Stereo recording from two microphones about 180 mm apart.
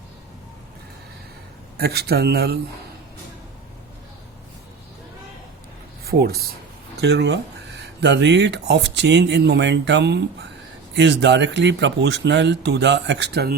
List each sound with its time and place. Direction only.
1.8 s speech: 60° right (ahead or behind)
6.1 s speech: 60° right (ahead or behind)